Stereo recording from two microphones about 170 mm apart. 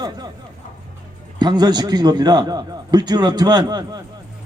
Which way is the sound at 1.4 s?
25° right (ahead or behind).